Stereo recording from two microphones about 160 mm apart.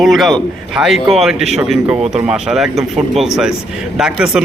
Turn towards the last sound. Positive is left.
turn(degrees=-5)  # may be behind; listen again after turning